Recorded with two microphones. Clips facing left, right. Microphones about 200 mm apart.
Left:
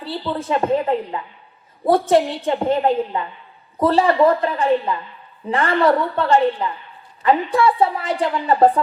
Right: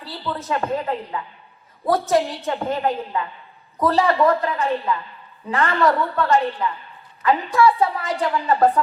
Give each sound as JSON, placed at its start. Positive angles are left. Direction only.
{"t": 0.0, "sound": "a woman's voice", "side_deg": 25}